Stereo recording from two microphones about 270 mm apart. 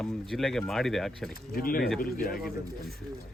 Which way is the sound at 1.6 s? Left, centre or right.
Left.